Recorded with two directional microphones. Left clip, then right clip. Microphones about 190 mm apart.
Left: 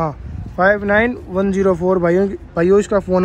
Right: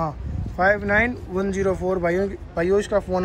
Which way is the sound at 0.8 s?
90° left.